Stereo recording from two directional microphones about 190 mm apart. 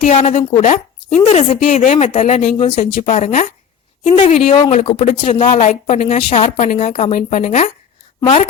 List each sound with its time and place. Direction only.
0.0 s a woman's voice: 40° left (ahead or behind)